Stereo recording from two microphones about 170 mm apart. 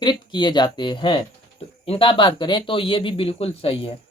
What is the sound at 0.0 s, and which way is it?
Speech, 25° left (ahead or behind).